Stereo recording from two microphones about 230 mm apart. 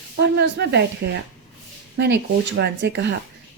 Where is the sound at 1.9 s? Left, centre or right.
Right.